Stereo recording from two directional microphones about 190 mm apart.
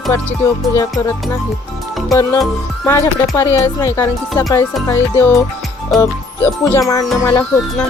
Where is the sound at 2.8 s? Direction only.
15° left (ahead or behind).